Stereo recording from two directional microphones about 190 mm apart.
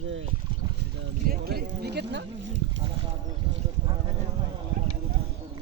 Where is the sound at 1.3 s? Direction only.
55° right (ahead or behind).